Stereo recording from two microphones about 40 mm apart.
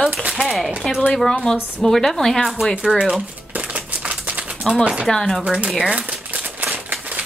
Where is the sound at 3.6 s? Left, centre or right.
Right.